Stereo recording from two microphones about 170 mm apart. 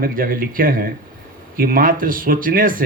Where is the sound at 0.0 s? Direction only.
55° right (ahead or behind).